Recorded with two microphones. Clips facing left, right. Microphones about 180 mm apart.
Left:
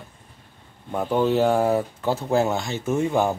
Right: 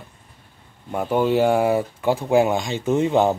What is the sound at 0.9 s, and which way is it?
Speech, 10° right (ahead or behind).